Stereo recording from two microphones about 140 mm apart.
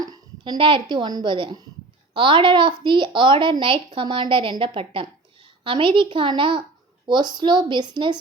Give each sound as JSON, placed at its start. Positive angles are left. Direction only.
{"t": 0.0, "sound": "a woman's voice", "side_deg": -30}